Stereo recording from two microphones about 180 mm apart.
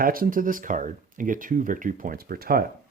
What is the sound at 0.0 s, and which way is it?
Speech, 55° right (ahead or behind).